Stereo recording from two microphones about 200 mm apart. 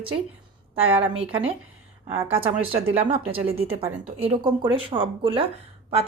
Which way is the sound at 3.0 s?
30° right (ahead or behind).